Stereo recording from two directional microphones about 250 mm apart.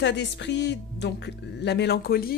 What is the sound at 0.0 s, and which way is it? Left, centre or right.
Speech, left.